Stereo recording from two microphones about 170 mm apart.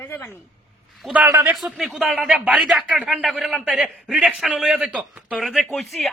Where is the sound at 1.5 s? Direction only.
Centre (ahead or behind).